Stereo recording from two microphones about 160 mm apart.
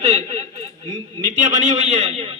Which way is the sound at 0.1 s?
45° right (ahead or behind).